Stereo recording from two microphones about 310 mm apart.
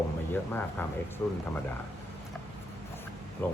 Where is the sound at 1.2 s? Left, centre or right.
Centre.